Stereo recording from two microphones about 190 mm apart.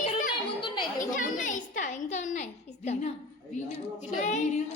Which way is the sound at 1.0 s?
45° left (ahead or behind).